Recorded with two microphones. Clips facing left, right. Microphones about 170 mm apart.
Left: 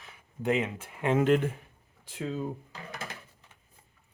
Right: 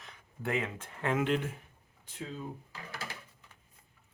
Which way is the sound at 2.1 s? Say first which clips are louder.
Left 8 dB; 80° left.